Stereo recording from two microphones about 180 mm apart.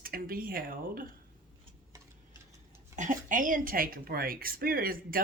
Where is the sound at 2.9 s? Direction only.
45° right (ahead or behind).